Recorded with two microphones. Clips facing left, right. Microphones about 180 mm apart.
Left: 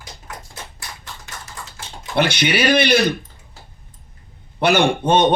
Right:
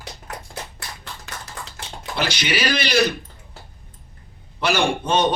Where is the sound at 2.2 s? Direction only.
60° left (ahead or behind).